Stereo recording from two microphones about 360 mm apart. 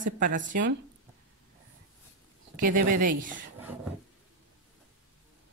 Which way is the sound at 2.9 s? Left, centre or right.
Right.